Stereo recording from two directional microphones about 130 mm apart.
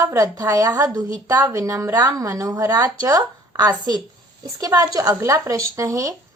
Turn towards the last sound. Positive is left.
turn(degrees=-25)  # may be behind; listen again after turning